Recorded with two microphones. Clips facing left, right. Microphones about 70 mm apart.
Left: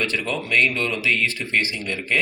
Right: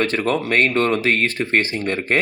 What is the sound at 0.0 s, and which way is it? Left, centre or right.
Speech, right.